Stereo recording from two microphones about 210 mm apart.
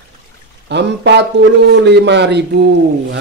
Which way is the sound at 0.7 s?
55° right (ahead or behind).